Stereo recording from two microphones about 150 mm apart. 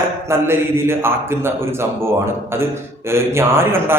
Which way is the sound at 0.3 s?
15° right (ahead or behind).